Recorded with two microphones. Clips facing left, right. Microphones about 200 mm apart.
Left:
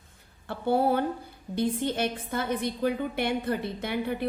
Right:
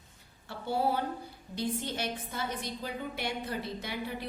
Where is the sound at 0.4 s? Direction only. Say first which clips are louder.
Left 6 dB; 55° left (ahead or behind).